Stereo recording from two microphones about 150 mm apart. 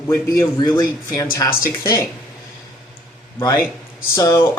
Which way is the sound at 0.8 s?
20° left (ahead or behind).